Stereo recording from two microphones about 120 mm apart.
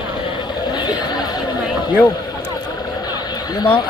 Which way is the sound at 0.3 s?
40° left (ahead or behind).